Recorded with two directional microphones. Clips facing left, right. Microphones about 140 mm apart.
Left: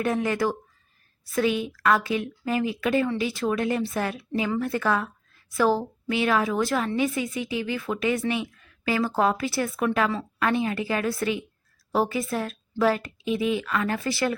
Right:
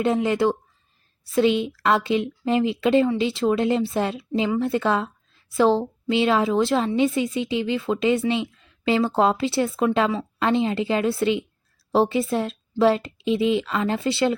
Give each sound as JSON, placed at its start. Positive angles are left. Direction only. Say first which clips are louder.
{"t": 0.0, "sound": "a woman's voice", "louder": "right 4 dB", "side_deg": -20}